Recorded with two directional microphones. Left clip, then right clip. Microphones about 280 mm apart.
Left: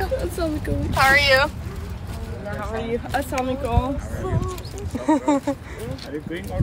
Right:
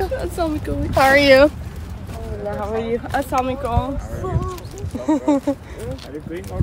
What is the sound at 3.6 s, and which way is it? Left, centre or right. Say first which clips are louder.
Speech: right 2 dB; centre.